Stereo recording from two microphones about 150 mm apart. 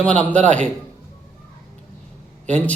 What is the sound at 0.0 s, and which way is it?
Speech, 10° left (ahead or behind).